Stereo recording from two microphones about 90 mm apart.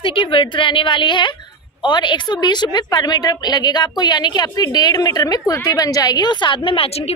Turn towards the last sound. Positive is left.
turn(degrees=85)